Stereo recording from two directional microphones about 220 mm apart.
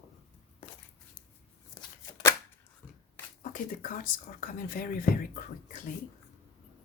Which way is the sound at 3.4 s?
35° left (ahead or behind).